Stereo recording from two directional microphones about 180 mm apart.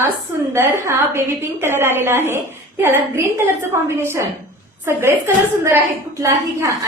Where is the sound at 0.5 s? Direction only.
15° right (ahead or behind).